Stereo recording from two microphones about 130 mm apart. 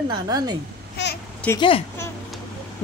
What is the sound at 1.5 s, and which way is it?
Speech, 45° left (ahead or behind).